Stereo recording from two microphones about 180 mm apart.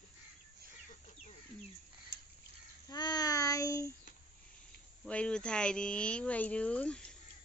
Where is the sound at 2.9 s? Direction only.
20° left (ahead or behind).